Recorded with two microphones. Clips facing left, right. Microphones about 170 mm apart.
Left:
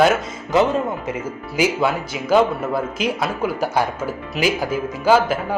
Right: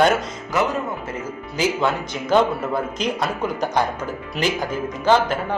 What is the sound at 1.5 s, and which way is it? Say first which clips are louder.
Speech: left 2 dB; 10° left (ahead or behind).